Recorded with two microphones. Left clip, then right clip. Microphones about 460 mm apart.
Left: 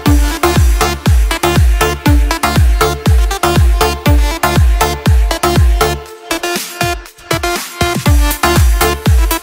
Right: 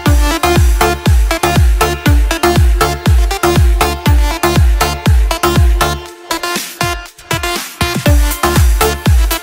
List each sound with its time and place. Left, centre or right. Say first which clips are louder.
0.0 s music: even; centre
6.2 s music: even; right
8.0 s music: even; centre